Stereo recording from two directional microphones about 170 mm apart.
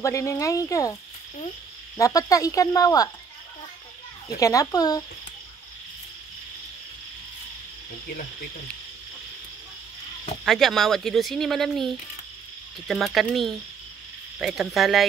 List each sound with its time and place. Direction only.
0.0 s speech: 15° left (ahead or behind)
2.0 s speech: 20° left (ahead or behind)
4.4 s speech: 20° left (ahead or behind)
10.4 s speech: centre (ahead or behind)